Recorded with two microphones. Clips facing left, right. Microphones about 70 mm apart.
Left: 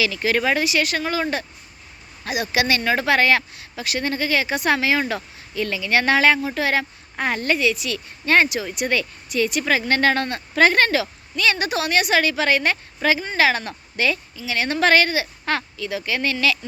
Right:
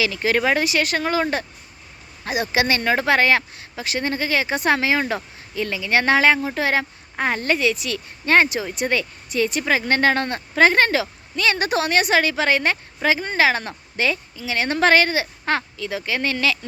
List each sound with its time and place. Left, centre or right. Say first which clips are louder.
0.0 s speech: right 1 dB; right